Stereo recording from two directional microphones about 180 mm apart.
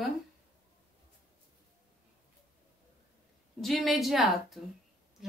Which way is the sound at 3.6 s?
Centre (ahead or behind).